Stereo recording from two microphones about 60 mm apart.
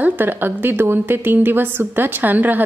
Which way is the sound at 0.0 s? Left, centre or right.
Right.